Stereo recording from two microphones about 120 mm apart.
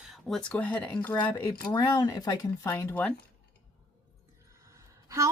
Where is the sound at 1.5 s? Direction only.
25° left (ahead or behind).